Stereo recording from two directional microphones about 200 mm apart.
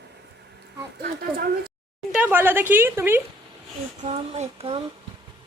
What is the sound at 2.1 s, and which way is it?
Speech, 10° right (ahead or behind).